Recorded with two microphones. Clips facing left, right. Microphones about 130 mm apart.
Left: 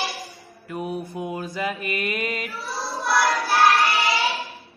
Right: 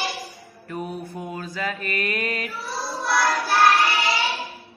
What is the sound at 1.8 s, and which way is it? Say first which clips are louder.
Child singing: even; 5° left (ahead or behind).